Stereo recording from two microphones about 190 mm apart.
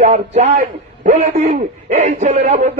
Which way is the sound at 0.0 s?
35° right (ahead or behind).